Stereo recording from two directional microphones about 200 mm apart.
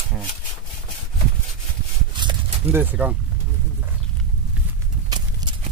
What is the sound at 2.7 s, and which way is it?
Speech, 10° right (ahead or behind).